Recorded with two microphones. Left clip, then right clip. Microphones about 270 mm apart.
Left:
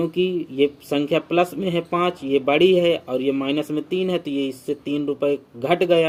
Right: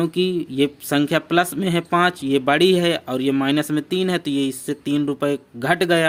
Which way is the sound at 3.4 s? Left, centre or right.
Right.